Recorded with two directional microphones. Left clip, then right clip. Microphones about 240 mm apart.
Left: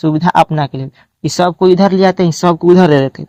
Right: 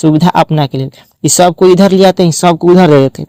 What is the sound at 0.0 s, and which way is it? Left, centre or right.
Speech, right.